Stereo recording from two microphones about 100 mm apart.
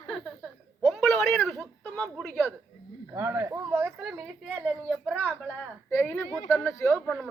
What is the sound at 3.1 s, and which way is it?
Speech, 25° right (ahead or behind).